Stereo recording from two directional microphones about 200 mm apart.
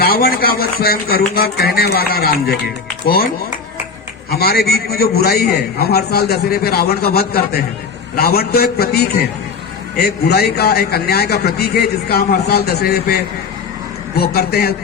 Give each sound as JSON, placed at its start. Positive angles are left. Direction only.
{"t": 0.0, "sound": "a man's voice", "side_deg": 50}
{"t": 4.3, "sound": "a man's voice", "side_deg": 50}
{"t": 10.0, "sound": "a man's voice", "side_deg": 50}